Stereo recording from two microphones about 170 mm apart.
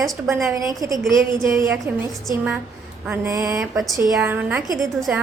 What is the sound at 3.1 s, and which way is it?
A woman's voice, 20° right (ahead or behind).